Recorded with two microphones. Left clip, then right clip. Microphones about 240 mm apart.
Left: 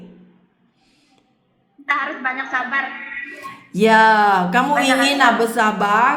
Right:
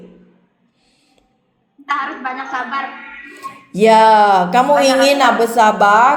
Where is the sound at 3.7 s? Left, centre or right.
Centre.